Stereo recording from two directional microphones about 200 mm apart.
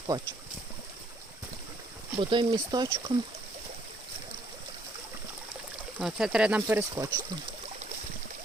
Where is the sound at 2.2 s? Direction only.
25° right (ahead or behind).